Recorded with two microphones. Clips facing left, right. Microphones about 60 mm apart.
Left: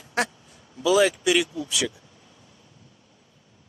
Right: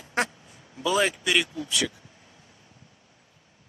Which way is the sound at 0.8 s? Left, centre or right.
Centre.